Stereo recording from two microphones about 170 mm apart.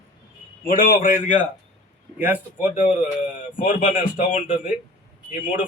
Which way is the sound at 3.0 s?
50° left (ahead or behind).